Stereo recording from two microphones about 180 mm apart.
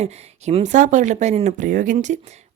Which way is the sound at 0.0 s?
35° right (ahead or behind).